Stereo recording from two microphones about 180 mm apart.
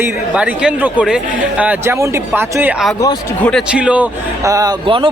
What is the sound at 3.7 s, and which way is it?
Speech, 5° right (ahead or behind).